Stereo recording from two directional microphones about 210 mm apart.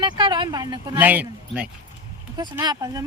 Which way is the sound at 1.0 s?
10° right (ahead or behind).